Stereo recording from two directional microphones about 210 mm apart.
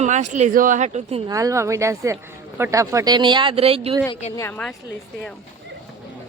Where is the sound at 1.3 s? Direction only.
15° right (ahead or behind).